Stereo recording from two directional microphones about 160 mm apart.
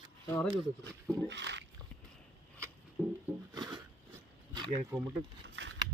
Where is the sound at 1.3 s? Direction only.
90° right.